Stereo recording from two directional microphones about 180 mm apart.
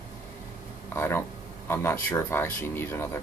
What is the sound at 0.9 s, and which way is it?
Speech, 15° left (ahead or behind).